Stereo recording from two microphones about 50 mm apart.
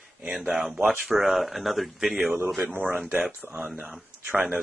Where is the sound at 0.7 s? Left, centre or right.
Centre.